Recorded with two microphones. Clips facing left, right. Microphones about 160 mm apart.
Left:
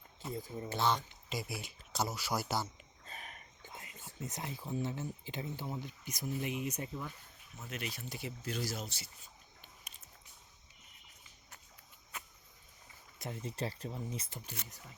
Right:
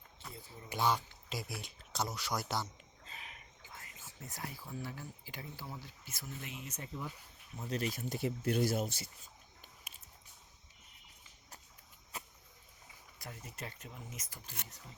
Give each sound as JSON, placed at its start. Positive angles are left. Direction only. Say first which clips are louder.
{"t": 0.7, "sound": "speech", "louder": "even", "side_deg": -10}
{"t": 3.1, "sound": "a sound", "louder": "left 3 dB", "side_deg": 45}
{"t": 3.7, "sound": "speech", "louder": "left 3 dB", "side_deg": 20}
{"t": 7.6, "sound": "speech", "louder": "right 6 dB", "side_deg": -35}
{"t": 8.1, "sound": "speech", "louder": "right 9 dB", "side_deg": -55}
{"t": 12.1, "sound": "cricket", "louder": "right 1 dB", "side_deg": -35}
{"t": 13.1, "sound": "speech", "louder": "left 8 dB", "side_deg": 25}